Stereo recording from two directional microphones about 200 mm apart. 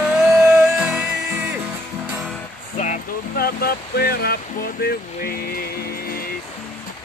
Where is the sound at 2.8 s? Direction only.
45° left (ahead or behind).